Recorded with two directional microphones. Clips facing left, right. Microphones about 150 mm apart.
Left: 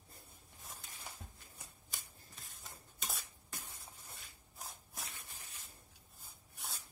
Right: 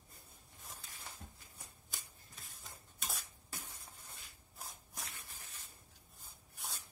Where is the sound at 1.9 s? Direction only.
Centre (ahead or behind).